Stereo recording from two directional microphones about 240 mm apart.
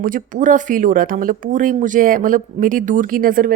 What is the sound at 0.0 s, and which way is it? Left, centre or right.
Speech, right.